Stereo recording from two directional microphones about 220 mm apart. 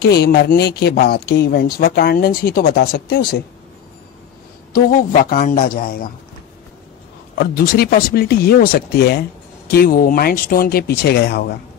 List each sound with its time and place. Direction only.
0.0 s speech: 45° left (ahead or behind)
4.7 s a man's voice: 40° left (ahead or behind)
7.3 s speech: 45° left (ahead or behind)